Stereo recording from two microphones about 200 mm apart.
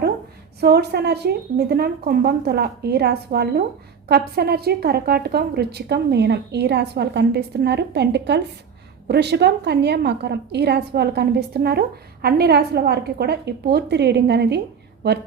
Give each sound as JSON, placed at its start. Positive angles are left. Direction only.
{"t": 0.6, "sound": "a woman's voice", "side_deg": -55}